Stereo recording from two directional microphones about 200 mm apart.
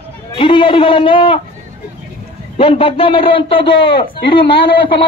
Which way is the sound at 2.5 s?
25° left (ahead or behind).